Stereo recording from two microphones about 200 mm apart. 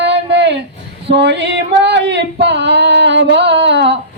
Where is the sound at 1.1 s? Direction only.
60° right (ahead or behind).